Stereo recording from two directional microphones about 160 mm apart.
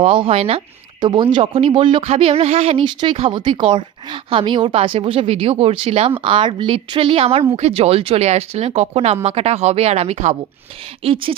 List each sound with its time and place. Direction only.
0.0 s speech: 35° right (ahead or behind)